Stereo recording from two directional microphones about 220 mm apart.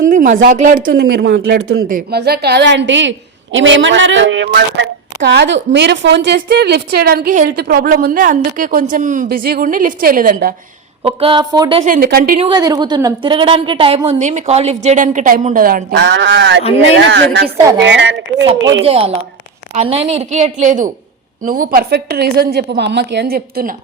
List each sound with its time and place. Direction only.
0.1 s speech: 35° right (ahead or behind)
11.0 s a woman's voice: 25° right (ahead or behind)
11.8 s speech: 40° right (ahead or behind)
12.4 s a woman's voice: 20° right (ahead or behind); by 18.2 s 55° right (ahead or behind)
18.9 s a woman's voice: 25° right (ahead or behind); by 23.7 s 45° right (ahead or behind)